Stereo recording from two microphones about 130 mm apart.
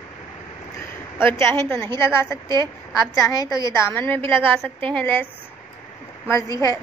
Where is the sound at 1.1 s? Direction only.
20° left (ahead or behind).